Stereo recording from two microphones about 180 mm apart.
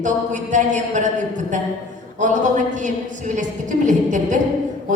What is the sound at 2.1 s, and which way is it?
A woman's voice, 45° right (ahead or behind).